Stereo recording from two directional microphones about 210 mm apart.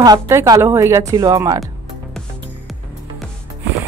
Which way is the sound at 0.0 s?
15° right (ahead or behind).